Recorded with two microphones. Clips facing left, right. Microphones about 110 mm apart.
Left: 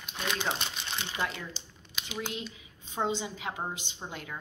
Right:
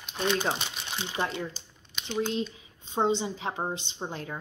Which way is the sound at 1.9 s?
5° left (ahead or behind).